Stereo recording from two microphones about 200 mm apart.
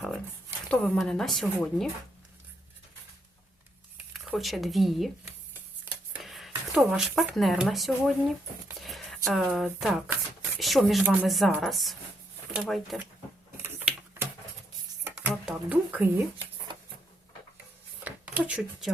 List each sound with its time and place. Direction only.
0.7 s speech: 5° left (ahead or behind)
4.1 s speech: centre (ahead or behind)
5.8 s a sound: centre (ahead or behind)
8.8 s speech: centre (ahead or behind)
13.6 s typewriter: 10° right (ahead or behind)
15.3 s speech: 5° right (ahead or behind)
16.7 s printer: 25° right (ahead or behind)
18.0 s a sound: 5° right (ahead or behind)